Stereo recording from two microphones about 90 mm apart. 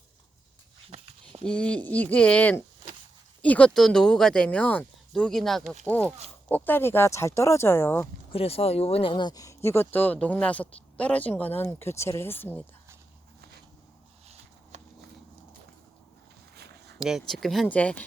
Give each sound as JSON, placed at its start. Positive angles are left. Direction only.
{"t": 1.5, "sound": "speech", "side_deg": 10}
{"t": 3.8, "sound": "speech", "side_deg": 5}
{"t": 5.1, "sound": "speech", "side_deg": 5}
{"t": 5.9, "sound": "speech", "side_deg": 15}
{"t": 8.3, "sound": "speech", "side_deg": 90}
{"t": 9.2, "sound": "speech", "side_deg": 40}
{"t": 9.6, "sound": "speech", "side_deg": 25}
{"t": 17.0, "sound": "speech", "side_deg": -5}
{"t": 17.7, "sound": "speech", "side_deg": 15}